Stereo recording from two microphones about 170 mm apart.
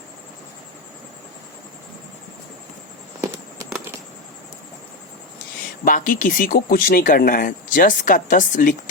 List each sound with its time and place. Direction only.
5.8 s speech: 55° left (ahead or behind)